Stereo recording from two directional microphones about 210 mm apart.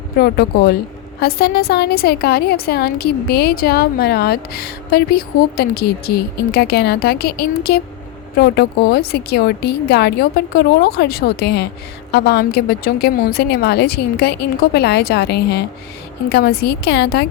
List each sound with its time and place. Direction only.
0.2 s a woman's voice: 50° left (ahead or behind)